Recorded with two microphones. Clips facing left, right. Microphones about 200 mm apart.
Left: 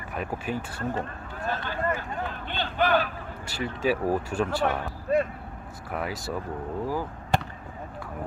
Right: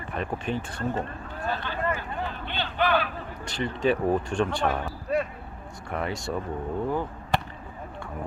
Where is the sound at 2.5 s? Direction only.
45° left (ahead or behind).